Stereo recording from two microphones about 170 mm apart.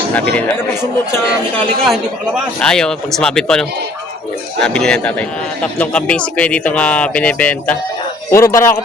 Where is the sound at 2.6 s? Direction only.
5° left (ahead or behind).